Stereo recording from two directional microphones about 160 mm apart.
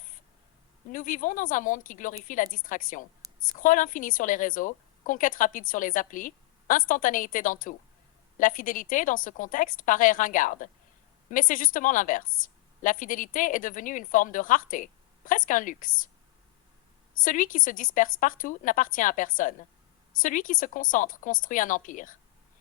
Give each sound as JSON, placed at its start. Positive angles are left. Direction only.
{"t": 0.9, "sound": "a woman's voice", "side_deg": 55}
{"t": 17.2, "sound": "a woman's voice", "side_deg": 55}